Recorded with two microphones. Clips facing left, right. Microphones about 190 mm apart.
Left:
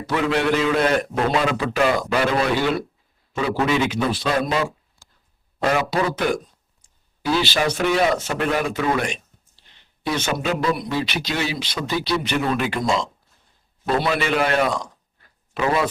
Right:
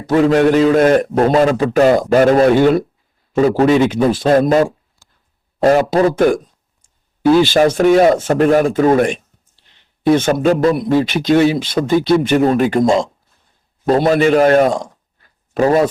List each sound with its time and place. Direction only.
0.1 s a man's voice: 40° right (ahead or behind)